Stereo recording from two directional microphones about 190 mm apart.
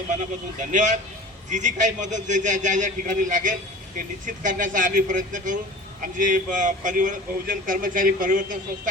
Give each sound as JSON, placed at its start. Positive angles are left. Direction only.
{"t": 0.7, "sound": "a man's voice", "side_deg": -40}